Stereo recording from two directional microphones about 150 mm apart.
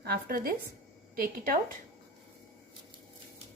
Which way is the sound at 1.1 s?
70° right (ahead or behind).